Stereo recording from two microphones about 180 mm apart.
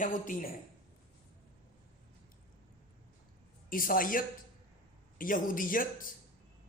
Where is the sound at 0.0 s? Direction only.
50° left (ahead or behind).